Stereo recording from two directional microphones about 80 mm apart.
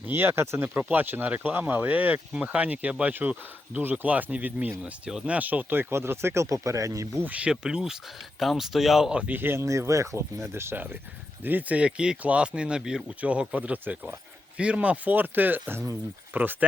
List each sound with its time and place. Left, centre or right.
0.1 s speech: right
5.9 s speech: right
7.3 s speech: centre